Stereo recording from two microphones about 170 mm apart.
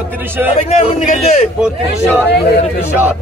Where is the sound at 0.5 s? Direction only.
45° left (ahead or behind).